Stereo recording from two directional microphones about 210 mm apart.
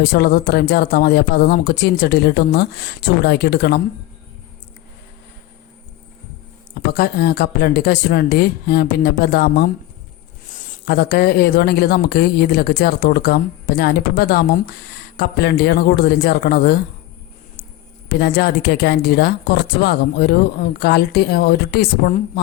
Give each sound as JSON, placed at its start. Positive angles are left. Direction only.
{"t": 0.0, "sound": "speech", "side_deg": 50}
{"t": 6.9, "sound": "speech", "side_deg": 50}
{"t": 18.1, "sound": "speech", "side_deg": 50}